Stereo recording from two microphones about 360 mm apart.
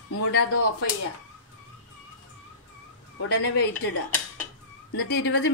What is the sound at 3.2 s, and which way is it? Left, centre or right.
Fowl, left.